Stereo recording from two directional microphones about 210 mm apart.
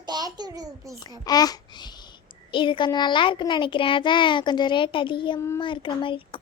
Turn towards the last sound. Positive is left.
turn(degrees=25)  # may be behind; listen again after turning